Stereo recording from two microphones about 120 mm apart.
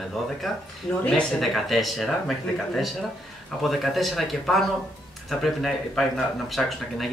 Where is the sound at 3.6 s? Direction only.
Centre (ahead or behind).